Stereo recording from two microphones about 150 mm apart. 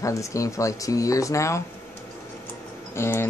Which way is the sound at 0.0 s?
20° left (ahead or behind).